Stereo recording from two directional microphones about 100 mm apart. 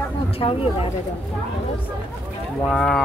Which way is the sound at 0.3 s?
70° left (ahead or behind).